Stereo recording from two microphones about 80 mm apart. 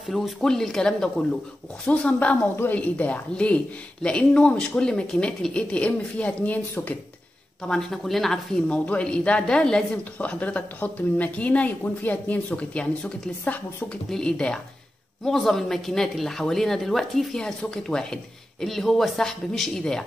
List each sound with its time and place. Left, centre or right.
0.1 s speech: centre
7.6 s speech: centre